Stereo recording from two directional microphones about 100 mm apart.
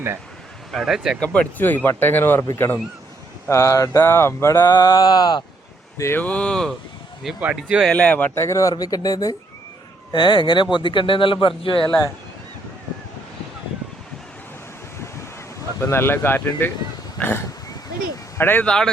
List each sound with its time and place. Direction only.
0.7 s speech: 5° right (ahead or behind)
1.2 s mantra: 15° left (ahead or behind)
3.5 s mantra: 30° left (ahead or behind)
4.8 s mantra: 40° left (ahead or behind)
6.0 s mantra: 25° left (ahead or behind)
6.2 s speech: 10° left (ahead or behind)
7.3 s speech: 10° right (ahead or behind)
7.9 s speech: 10° left (ahead or behind)
8.4 s speech: 30° left (ahead or behind)
10.1 s speech: 50° left (ahead or behind)
15.8 s mantra: 25° left (ahead or behind)
18.3 s speech: 20° left (ahead or behind)